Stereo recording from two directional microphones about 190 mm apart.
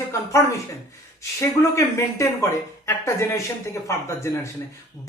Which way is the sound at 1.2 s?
15° left (ahead or behind).